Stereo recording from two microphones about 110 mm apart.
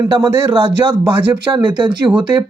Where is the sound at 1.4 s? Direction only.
50° right (ahead or behind).